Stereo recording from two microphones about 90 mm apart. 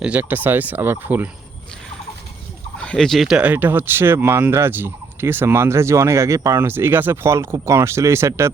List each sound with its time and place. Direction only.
0.0 s speech: 20° right (ahead or behind)
2.7 s speech: 10° left (ahead or behind)
3.4 s speech: 20° right (ahead or behind)